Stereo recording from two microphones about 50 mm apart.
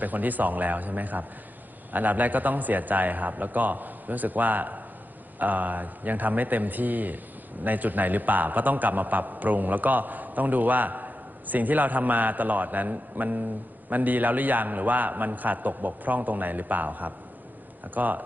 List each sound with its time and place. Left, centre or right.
0.0 s a man's voice: right